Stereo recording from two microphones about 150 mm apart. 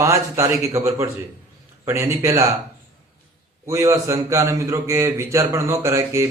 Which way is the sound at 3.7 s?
20° right (ahead or behind).